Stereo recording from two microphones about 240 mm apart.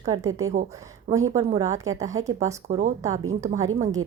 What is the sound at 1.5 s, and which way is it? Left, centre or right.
A woman's voice, centre.